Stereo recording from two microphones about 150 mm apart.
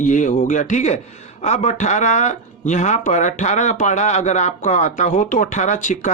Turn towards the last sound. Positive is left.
turn(degrees=55)  # may be behind; listen again after turning